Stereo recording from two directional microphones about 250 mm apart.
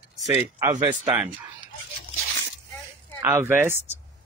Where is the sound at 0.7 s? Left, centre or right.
Right.